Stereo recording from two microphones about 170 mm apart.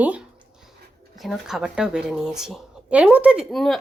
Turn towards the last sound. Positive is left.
turn(degrees=0)  # may be behind; listen again after turning